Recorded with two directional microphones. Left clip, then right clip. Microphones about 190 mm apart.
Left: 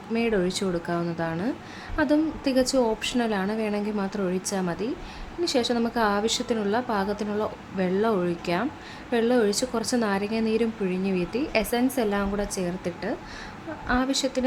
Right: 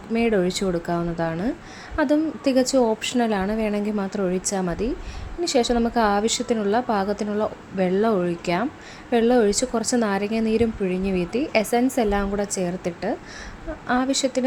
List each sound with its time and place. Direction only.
0.1 s a woman's voice: 15° right (ahead or behind)